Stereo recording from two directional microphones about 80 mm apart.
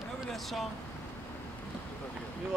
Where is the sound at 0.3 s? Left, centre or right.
Centre.